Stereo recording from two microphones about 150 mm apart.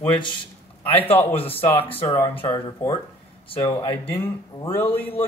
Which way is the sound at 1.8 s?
40° left (ahead or behind).